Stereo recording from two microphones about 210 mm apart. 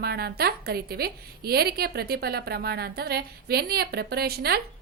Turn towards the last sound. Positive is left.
turn(degrees=-50)  # may be behind; listen again after turning